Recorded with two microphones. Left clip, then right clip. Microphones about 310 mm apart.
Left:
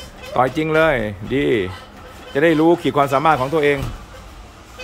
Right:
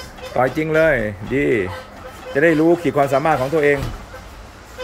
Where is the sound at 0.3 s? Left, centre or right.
Centre.